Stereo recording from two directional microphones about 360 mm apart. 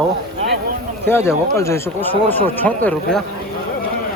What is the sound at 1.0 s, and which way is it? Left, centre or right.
Speech, centre.